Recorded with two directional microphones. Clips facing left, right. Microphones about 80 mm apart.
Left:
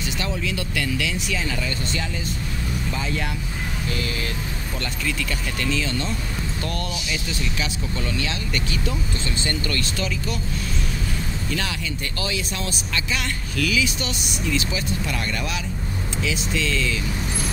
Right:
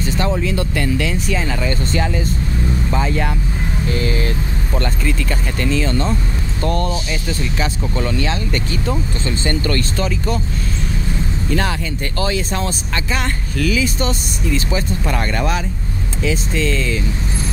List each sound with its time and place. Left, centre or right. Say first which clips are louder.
0.0 s speech: right 8 dB; right
5.6 s speech: right 7 dB; right
9.4 s speech: right 8 dB; right
12.2 s speech: right 9 dB; right